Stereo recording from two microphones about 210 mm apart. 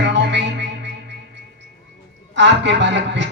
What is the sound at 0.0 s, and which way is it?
Music, 55° right (ahead or behind).